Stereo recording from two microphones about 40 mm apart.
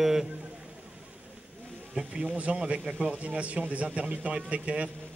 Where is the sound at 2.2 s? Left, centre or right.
Right.